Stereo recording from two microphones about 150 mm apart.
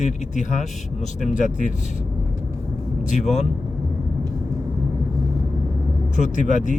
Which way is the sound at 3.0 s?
50° left (ahead or behind).